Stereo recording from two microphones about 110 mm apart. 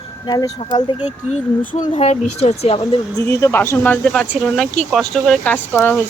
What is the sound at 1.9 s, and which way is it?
Speech, 65° left (ahead or behind).